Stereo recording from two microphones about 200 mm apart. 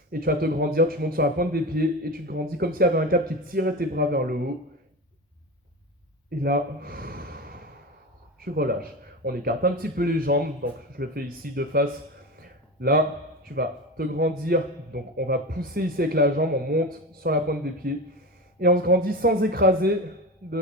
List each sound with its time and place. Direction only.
0.1 s a man's voice: 45° right (ahead or behind)
6.4 s gasp: 50° right (ahead or behind)
8.4 s a man's voice: 50° right (ahead or behind)
12.4 s a sound: 50° right (ahead or behind)
13.4 s a man's voice: 50° right (ahead or behind)